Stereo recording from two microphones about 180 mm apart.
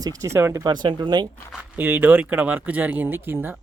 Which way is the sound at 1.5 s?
10° right (ahead or behind).